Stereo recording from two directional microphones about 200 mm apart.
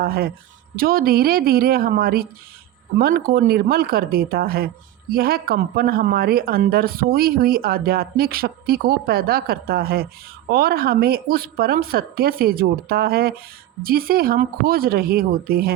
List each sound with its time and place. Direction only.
0.0 s speech: 50° right (ahead or behind)